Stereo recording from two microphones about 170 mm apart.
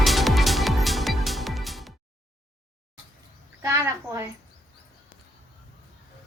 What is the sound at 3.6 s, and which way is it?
Cricket, 15° right (ahead or behind).